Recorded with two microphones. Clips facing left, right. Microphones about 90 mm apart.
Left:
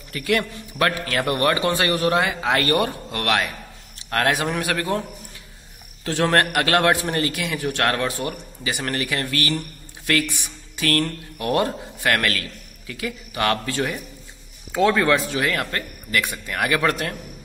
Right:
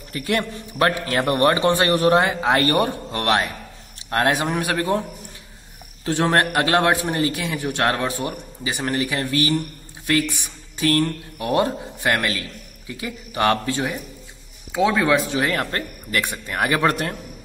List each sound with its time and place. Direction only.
0.1 s a man's voice: 30° right (ahead or behind)
6.0 s a man's voice: 20° right (ahead or behind)
14.7 s speech: 10° right (ahead or behind)
15.3 s speech: 30° right (ahead or behind)